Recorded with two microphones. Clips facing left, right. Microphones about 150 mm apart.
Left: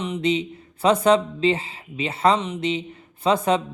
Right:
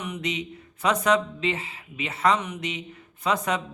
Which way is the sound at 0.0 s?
30° left (ahead or behind).